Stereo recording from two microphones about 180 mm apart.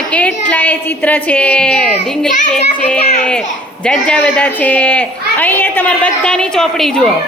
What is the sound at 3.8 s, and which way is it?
A woman's voice, 5° left (ahead or behind).